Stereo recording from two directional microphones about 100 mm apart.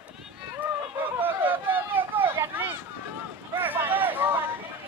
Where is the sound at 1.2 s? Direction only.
20° right (ahead or behind).